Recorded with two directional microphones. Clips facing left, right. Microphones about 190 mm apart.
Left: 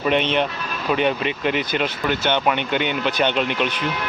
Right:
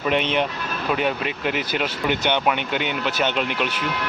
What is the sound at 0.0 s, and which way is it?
Speech, 5° right (ahead or behind).